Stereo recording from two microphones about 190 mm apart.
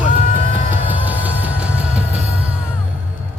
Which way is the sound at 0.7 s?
10° right (ahead or behind).